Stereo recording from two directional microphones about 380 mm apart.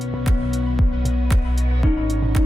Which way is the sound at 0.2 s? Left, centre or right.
Centre.